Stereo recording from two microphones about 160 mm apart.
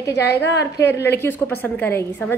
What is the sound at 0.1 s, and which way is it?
Speech, 90° left.